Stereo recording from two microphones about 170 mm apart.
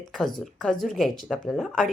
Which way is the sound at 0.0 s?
Centre (ahead or behind).